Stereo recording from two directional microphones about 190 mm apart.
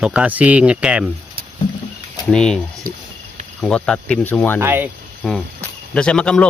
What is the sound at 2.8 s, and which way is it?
Speech, 50° right (ahead or behind).